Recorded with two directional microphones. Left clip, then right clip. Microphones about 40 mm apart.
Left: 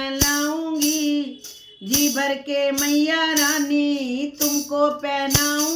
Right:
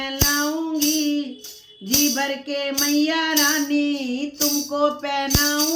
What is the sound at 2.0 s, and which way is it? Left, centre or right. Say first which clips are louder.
Speech: left 1 dB; left.